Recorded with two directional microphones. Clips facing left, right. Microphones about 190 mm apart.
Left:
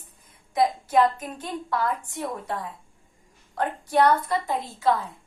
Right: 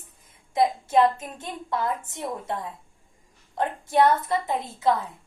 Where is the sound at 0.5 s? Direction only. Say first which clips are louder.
Even; 25° right (ahead or behind).